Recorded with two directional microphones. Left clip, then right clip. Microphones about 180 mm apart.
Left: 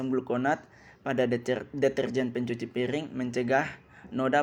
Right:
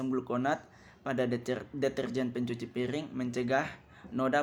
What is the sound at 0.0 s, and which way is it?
Speech, 5° left (ahead or behind).